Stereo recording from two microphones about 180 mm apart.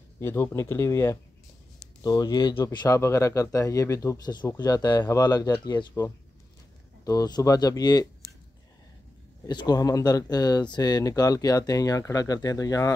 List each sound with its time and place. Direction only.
0.2 s speech: 15° left (ahead or behind)
9.5 s speech: 25° left (ahead or behind)